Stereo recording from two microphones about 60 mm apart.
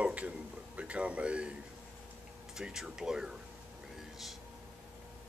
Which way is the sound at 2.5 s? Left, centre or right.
Centre.